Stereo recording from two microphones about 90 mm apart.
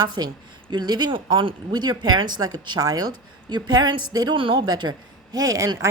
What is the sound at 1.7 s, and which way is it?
A woman's voice, 50° right (ahead or behind).